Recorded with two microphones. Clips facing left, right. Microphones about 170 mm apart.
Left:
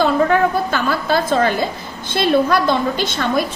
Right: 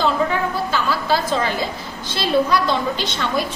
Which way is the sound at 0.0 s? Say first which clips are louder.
Left 5 dB; 55° left (ahead or behind).